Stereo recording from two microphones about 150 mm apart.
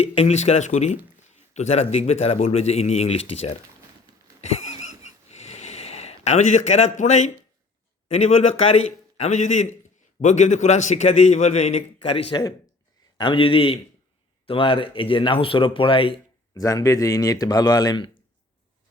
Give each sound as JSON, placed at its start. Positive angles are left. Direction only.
{"t": 0.0, "sound": "a man's voice", "side_deg": 40}
{"t": 4.4, "sound": "wheeze", "side_deg": 50}
{"t": 8.1, "sound": "a man's voice", "side_deg": 45}
{"t": 16.6, "sound": "speech", "side_deg": 20}